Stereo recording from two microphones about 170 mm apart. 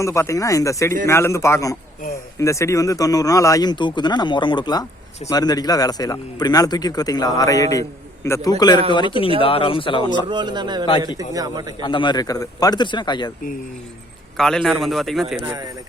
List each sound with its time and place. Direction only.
0.0 s a man's voice: 15° left (ahead or behind)
10.2 s a man's voice: 25° right (ahead or behind)
11.8 s a man's voice: 30° left (ahead or behind)
14.3 s a man's voice: 5° left (ahead or behind)
15.4 s a man's voice: 20° right (ahead or behind)